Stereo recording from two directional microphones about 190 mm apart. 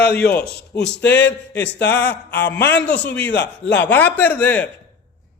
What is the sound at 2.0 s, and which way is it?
Speech, 65° left (ahead or behind).